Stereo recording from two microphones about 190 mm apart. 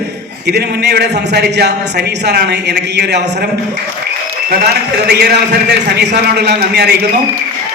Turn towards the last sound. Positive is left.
turn(degrees=-60)  # may be behind; listen again after turning